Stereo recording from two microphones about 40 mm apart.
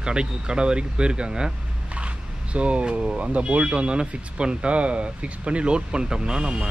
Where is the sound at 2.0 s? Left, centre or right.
Right.